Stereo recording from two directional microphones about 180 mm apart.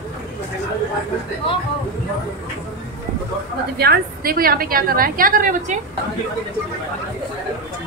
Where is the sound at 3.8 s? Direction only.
60° right (ahead or behind).